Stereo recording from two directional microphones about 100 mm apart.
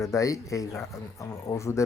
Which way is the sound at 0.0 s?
30° left (ahead or behind).